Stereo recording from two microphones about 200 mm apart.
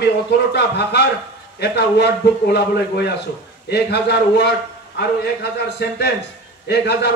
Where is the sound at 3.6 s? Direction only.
55° left (ahead or behind).